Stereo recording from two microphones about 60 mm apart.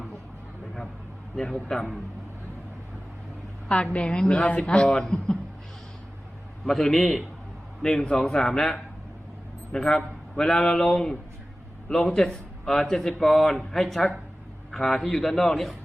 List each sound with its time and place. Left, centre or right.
1.4 s a man's voice: centre
3.9 s a man's voice: centre
4.7 s a man's voice: centre
6.7 s a man's voice: centre